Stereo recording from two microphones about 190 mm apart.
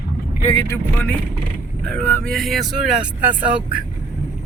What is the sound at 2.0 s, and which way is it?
Speech, 5° left (ahead or behind).